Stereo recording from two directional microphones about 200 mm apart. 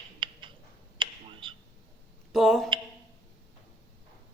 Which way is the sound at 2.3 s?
Centre (ahead or behind).